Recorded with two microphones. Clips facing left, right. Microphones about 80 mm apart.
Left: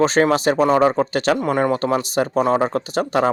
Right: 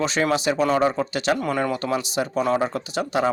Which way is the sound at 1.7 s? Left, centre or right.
Left.